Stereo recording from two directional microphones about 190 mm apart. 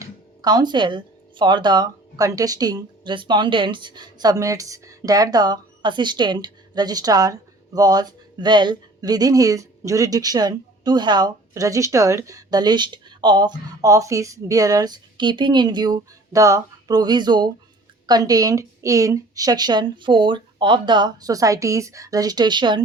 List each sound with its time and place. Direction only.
0.0 s speech: 20° right (ahead or behind)